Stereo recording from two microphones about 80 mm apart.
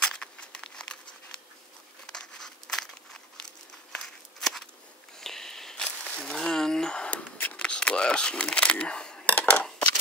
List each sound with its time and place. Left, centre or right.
0.0 s crumpling: centre
2.0 s crumpling: centre
3.9 s walk: centre
5.2 s a sound: centre
9.3 s scissors: left